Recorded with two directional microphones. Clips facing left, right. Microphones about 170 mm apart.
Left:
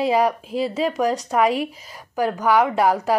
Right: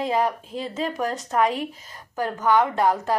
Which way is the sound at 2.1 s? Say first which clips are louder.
Left 2 dB; 10° left (ahead or behind).